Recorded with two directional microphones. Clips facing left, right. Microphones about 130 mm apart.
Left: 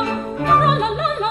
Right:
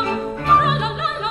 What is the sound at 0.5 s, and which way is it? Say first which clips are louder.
Opera: left 2 dB; 45° left (ahead or behind).